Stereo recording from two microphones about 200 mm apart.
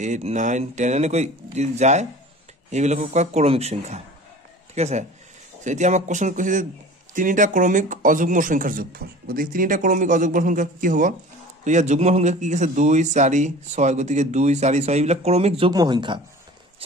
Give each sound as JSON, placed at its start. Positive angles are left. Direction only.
{"t": 0.0, "sound": "speech", "side_deg": -35}